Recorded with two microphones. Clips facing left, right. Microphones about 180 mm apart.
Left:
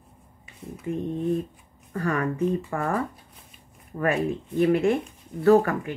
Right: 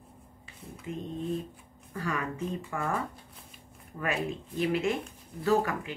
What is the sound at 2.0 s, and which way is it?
Speech, 50° left (ahead or behind).